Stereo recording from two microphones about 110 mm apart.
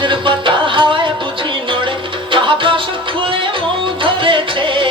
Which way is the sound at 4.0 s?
50° right (ahead or behind).